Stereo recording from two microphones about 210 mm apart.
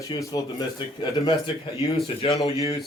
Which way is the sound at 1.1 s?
30° left (ahead or behind).